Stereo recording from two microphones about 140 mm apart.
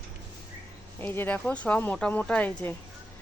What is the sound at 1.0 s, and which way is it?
Speech, 15° left (ahead or behind).